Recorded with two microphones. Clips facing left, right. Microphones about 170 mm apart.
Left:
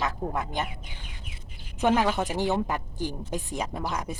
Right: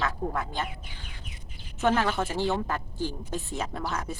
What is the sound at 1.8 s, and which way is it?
A woman's voice, 15° left (ahead or behind).